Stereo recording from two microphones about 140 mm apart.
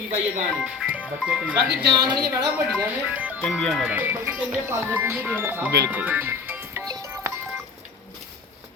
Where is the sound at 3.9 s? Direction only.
15° right (ahead or behind).